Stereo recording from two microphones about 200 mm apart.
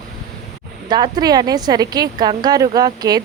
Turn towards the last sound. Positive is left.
turn(degrees=-20)  # may be behind; listen again after turning